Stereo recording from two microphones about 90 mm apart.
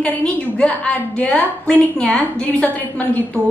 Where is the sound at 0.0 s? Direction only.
10° left (ahead or behind).